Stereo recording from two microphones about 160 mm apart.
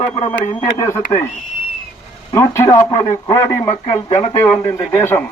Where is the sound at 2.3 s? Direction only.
20° left (ahead or behind).